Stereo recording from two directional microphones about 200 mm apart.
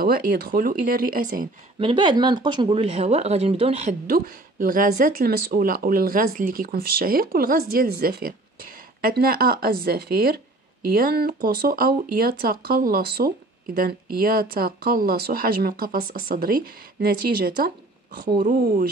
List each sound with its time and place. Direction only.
0.0 s speech: 45° right (ahead or behind)
1.8 s speech: 25° right (ahead or behind)
4.1 s speech: 45° right (ahead or behind)